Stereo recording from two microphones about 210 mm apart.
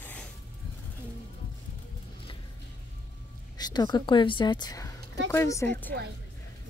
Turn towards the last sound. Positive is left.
turn(degrees=10)  # may be behind; listen again after turning